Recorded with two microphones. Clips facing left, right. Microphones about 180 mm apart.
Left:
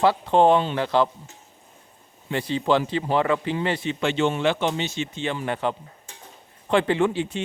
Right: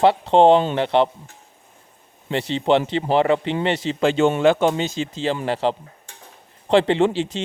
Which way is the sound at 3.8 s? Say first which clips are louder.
Right 6 dB; 35° right (ahead or behind).